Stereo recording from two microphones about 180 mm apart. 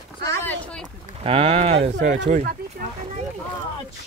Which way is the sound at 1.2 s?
30° right (ahead or behind).